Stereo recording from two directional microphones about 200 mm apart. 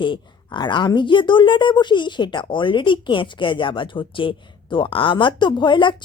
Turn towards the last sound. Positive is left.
turn(degrees=25)  # may be behind; listen again after turning